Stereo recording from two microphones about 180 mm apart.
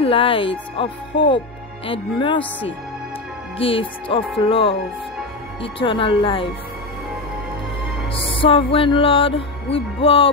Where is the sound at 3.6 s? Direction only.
30° left (ahead or behind).